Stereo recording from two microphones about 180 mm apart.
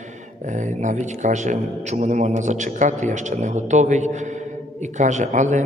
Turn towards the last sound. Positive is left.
turn(degrees=-40)  # may be behind; listen again after turning